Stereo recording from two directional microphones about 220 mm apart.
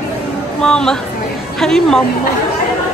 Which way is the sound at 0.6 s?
5° left (ahead or behind).